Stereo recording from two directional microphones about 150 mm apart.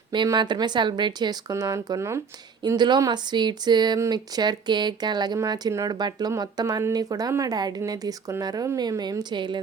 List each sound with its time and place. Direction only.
0.1 s speech: 30° right (ahead or behind)
2.6 s speech: 30° right (ahead or behind)